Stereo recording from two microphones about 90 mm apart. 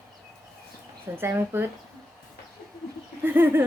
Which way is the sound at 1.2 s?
25° right (ahead or behind).